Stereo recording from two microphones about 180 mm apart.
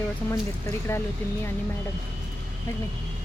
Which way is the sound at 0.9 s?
15° left (ahead or behind).